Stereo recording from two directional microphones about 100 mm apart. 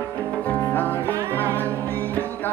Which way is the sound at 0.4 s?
15° left (ahead or behind).